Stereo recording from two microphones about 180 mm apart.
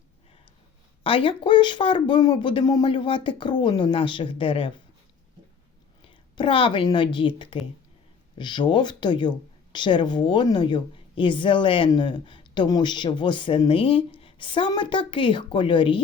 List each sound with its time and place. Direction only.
1.0 s speech: 30° left (ahead or behind)
6.1 s a woman's voice: 30° left (ahead or behind)